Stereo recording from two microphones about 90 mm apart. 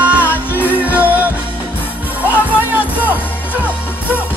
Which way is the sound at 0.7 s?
20° right (ahead or behind).